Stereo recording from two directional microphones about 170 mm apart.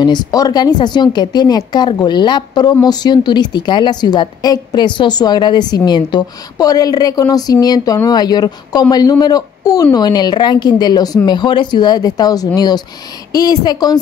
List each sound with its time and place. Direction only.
0.0 s a woman's voice: 25° left (ahead or behind)